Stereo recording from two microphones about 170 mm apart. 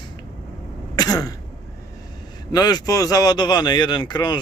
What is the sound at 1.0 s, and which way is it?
Throat clearing, 20° left (ahead or behind).